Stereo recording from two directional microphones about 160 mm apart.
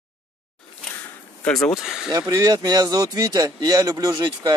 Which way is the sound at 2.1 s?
25° right (ahead or behind).